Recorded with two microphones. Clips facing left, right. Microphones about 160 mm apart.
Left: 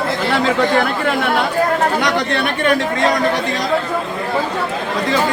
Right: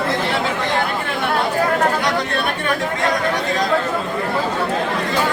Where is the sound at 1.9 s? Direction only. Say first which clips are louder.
Left 3 dB; 85° left.